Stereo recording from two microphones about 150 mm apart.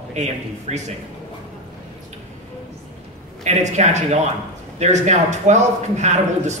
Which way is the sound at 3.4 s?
50° right (ahead or behind).